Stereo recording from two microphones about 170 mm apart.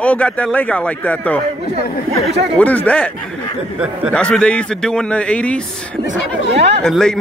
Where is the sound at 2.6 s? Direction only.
10° left (ahead or behind).